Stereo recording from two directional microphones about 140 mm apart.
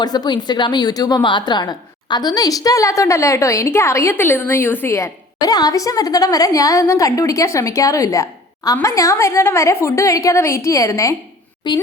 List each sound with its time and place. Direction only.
0.0 s a woman's voice: 30° left (ahead or behind)